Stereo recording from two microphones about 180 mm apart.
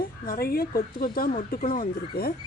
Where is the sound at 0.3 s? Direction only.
55° left (ahead or behind).